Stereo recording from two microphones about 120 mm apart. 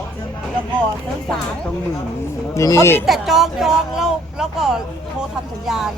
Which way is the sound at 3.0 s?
Centre (ahead or behind).